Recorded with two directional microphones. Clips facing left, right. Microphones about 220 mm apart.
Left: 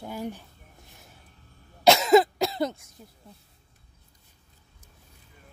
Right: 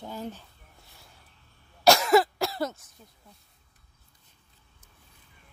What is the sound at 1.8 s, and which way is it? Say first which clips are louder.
Cough: left 2 dB; 20° left (ahead or behind).